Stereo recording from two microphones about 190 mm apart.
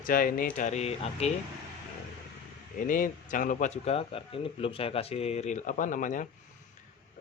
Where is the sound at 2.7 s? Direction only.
45° left (ahead or behind).